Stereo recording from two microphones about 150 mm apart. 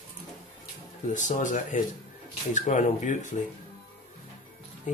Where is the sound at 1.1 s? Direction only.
55° left (ahead or behind).